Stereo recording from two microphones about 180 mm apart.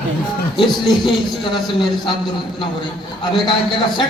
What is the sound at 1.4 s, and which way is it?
A man's voice, 25° left (ahead or behind).